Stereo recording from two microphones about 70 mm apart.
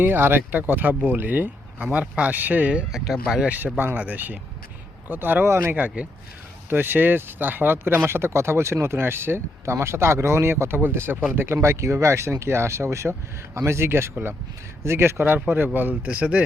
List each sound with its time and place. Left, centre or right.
0.0 s speech: right
5.5 s speech: right; by 16.4 s centre